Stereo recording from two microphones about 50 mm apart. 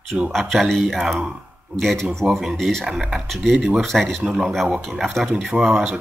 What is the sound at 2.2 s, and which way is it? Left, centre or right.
Speech, centre.